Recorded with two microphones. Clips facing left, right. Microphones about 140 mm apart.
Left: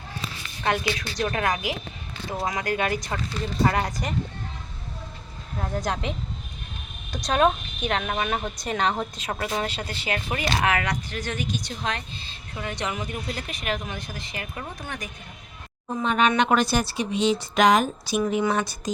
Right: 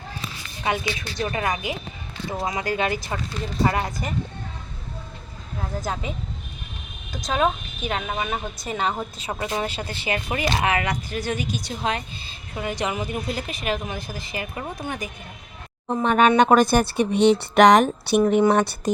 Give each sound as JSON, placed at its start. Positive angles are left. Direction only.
{"t": 0.6, "sound": "a woman's voice", "side_deg": -5}
{"t": 5.8, "sound": "a woman's voice", "side_deg": -5}
{"t": 16.0, "sound": "a woman's voice", "side_deg": -45}
{"t": 18.3, "sound": "a woman's voice", "side_deg": -55}